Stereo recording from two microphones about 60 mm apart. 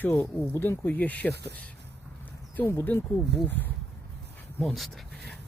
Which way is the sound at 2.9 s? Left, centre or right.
Left.